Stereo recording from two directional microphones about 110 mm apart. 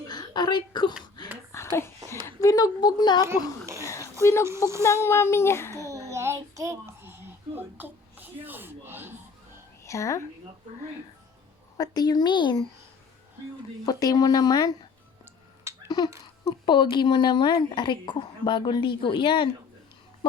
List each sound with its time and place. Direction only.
0.1 s a sound: 40° left (ahead or behind)
1.5 s a sound: 25° left (ahead or behind)
2.2 s a woman's voice: 30° left (ahead or behind)
3.8 s a sound: 25° left (ahead or behind)
4.2 s a child's voice: 25° left (ahead or behind)
5.9 s child singing: 30° right (ahead or behind)
9.8 s a woman's voice: 30° left (ahead or behind)
11.8 s speech: 35° left (ahead or behind)
13.8 s speech: 35° left (ahead or behind)
15.7 s babbling: 25° right (ahead or behind)
16.4 s speech: 45° left (ahead or behind)